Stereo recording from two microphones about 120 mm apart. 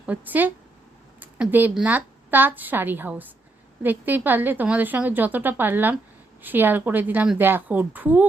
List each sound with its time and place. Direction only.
0.0 s a woman's voice: 15° right (ahead or behind)
1.2 s a sound: 15° right (ahead or behind)
1.7 s a woman's voice: 15° right (ahead or behind)